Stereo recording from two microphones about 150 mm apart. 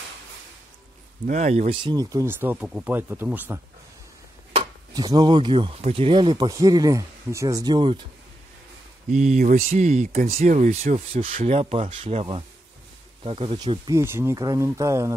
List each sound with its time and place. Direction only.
1.2 s speech: 55° right (ahead or behind)
1.8 s speech: 25° right (ahead or behind)
4.9 s speech: 25° right (ahead or behind)
9.1 s speech: 50° right (ahead or behind); by 10.4 s 70° right (ahead or behind)
10.4 s speech: 50° right (ahead or behind)
13.8 s speech: 15° right (ahead or behind)